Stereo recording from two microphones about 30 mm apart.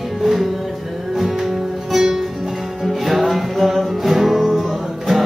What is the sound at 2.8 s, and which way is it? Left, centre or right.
Music, centre.